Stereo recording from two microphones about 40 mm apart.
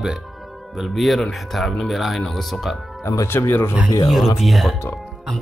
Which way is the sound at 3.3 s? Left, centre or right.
Left.